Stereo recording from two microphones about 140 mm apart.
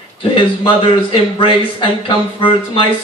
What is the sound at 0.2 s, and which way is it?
Speech, 40° left (ahead or behind).